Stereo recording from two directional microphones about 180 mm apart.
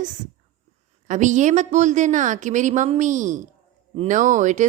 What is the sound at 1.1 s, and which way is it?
A woman's voice, 45° right (ahead or behind).